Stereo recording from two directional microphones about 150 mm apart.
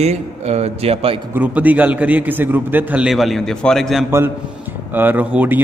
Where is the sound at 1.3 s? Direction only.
10° right (ahead or behind).